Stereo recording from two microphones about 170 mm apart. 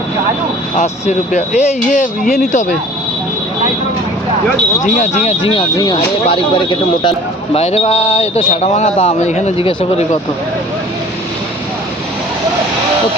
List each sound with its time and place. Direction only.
0.8 s speech: 45° left (ahead or behind)
2.2 s speech: centre (ahead or behind)
2.5 s speech: 45° left (ahead or behind)
4.8 s speech: 45° left (ahead or behind)
5.7 s speech: 20° left (ahead or behind)